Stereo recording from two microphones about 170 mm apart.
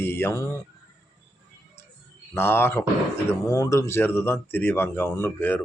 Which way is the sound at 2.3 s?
15° left (ahead or behind).